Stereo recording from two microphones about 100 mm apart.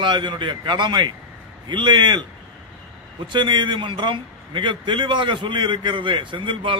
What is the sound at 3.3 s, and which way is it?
A man's voice, 50° right (ahead or behind).